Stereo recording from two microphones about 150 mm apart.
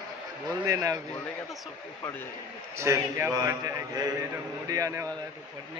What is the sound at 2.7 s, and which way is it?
A man's voice, 20° right (ahead or behind).